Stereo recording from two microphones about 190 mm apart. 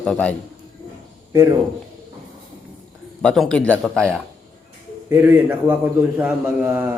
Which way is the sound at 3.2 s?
5° left (ahead or behind).